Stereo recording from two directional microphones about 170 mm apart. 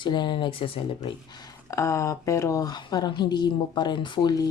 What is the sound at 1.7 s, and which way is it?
Speech, 15° left (ahead or behind).